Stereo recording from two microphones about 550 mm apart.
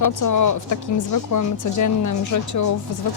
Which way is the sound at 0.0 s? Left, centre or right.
Left.